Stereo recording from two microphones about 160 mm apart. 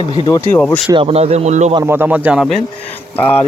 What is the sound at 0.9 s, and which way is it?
Speech, 40° right (ahead or behind).